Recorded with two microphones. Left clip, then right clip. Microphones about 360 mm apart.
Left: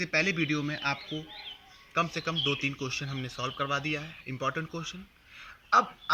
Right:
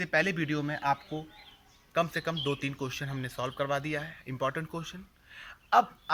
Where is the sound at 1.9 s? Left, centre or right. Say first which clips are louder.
Even; right.